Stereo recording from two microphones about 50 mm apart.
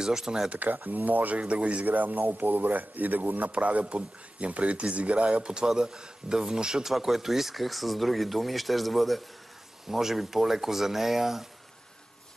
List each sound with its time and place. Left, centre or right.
0.0 s speech: centre
0.5 s speech: right
1.4 s speech: right; by 11.4 s centre